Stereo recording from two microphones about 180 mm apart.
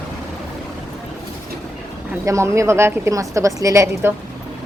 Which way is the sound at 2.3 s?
15° right (ahead or behind).